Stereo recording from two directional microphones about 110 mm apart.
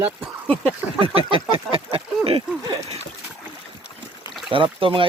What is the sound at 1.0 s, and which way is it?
Speech, 55° right (ahead or behind).